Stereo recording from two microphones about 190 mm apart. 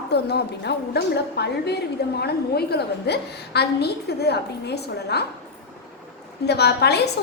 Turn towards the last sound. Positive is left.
turn(degrees=60)  # may be behind; listen again after turning